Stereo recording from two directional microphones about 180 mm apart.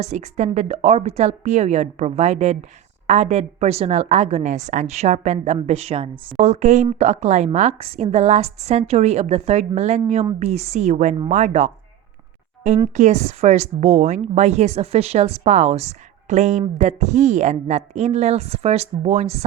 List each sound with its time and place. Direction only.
0.0 s speech: 40° right (ahead or behind)
12.9 s speech: 40° right (ahead or behind)